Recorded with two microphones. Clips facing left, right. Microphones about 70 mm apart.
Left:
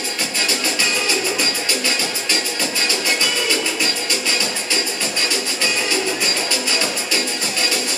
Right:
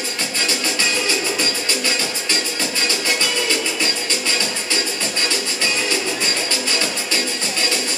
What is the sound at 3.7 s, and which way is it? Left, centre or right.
Music, centre.